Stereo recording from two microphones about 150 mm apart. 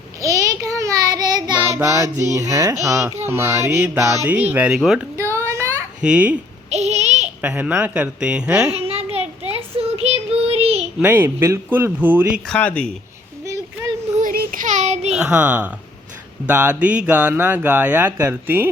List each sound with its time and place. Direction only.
0.2 s child singing: 20° right (ahead or behind)
1.8 s a sound: 20° right (ahead or behind)
2.8 s speech: 20° right (ahead or behind)
5.1 s a sound: 20° right (ahead or behind)
6.0 s speech: 10° right (ahead or behind)
6.7 s a sound: 45° right (ahead or behind)
7.4 s speech: 10° right (ahead or behind)
8.7 s a sound: 40° right (ahead or behind)
9.1 s child singing: 45° right (ahead or behind)
11.0 s speech: 10° right (ahead or behind)
12.5 s speech: 10° left (ahead or behind)
14.2 s child singing: 65° right (ahead or behind); by 15.1 s 50° right (ahead or behind)
15.1 s a woman's voice: 10° right (ahead or behind)